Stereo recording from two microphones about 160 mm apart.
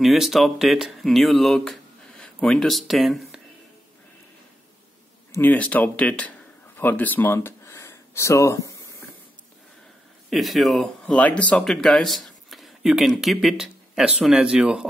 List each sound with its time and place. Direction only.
0.0 s speech: centre (ahead or behind)
5.3 s speech: 10° left (ahead or behind)
10.3 s speech: centre (ahead or behind)